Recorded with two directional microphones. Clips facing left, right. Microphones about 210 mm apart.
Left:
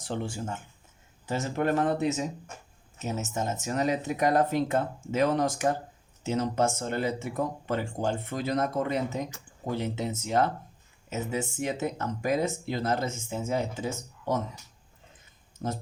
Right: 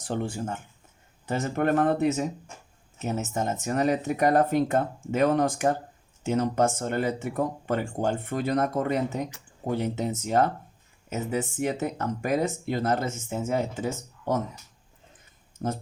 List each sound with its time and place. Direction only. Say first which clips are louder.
0.0 s speech: right 3 dB; 50° right (ahead or behind)
3.1 s speech: right 3 dB; 55° right (ahead or behind)
11.5 s speech: right 2 dB; 50° right (ahead or behind)